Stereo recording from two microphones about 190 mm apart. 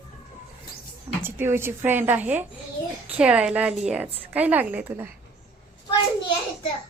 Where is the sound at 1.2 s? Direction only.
10° right (ahead or behind).